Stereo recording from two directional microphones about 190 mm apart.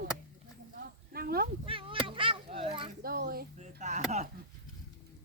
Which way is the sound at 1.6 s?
30° right (ahead or behind).